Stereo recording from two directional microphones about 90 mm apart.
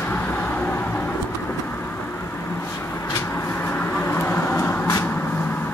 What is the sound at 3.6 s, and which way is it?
Vehicle, 25° left (ahead or behind).